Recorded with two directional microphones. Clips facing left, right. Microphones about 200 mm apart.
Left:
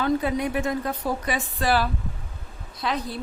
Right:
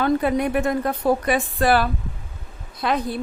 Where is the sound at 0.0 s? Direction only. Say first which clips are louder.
Right 4 dB; 55° right (ahead or behind).